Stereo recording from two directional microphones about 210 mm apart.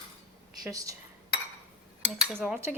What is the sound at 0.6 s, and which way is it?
Cutlery, 15° right (ahead or behind).